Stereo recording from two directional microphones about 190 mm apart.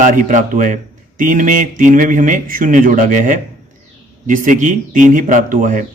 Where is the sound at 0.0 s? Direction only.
40° right (ahead or behind).